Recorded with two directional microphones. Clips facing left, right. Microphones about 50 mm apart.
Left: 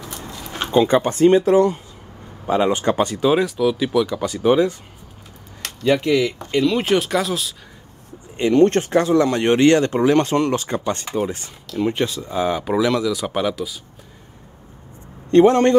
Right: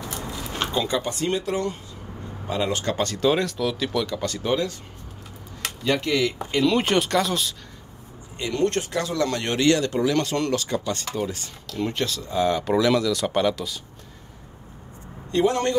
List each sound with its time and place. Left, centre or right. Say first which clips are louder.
0.0 s a sound: right 1 dB; centre
0.8 s speech: left 10 dB; left; by 4.7 s centre
5.9 s speech: left 5 dB; centre
8.4 s speech: left 9 dB; left
11.6 s speech: left 6 dB; centre
11.9 s speech: left 4 dB; centre
15.3 s speech: left 9 dB; left